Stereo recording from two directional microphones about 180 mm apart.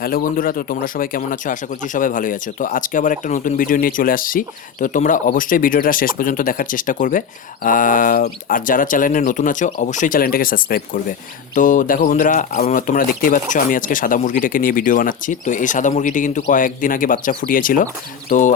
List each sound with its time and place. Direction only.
0.0 s speech: 50° left (ahead or behind)